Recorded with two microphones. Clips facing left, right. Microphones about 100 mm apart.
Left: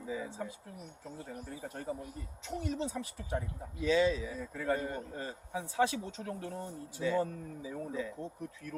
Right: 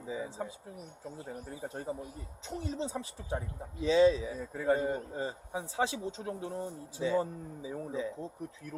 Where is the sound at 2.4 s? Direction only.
25° right (ahead or behind).